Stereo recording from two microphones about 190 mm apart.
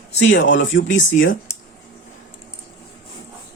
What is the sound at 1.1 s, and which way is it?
Speech, 90° left.